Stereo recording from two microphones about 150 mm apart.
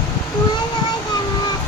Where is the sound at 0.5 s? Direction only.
25° left (ahead or behind).